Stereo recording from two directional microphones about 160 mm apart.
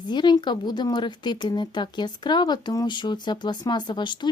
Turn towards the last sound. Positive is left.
turn(degrees=30)  # may be behind; listen again after turning